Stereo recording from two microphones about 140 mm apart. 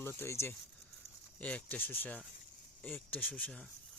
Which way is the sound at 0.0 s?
15° left (ahead or behind).